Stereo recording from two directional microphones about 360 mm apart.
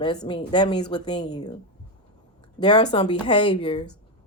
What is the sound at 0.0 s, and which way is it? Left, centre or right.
A woman's voice, centre.